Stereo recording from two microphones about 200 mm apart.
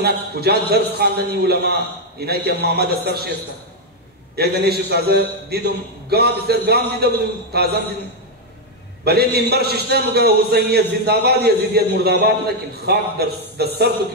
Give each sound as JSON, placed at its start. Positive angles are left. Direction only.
{"t": 0.0, "sound": "a man's voice", "side_deg": -50}
{"t": 4.4, "sound": "a man's voice", "side_deg": -55}
{"t": 9.0, "sound": "a man's voice", "side_deg": -50}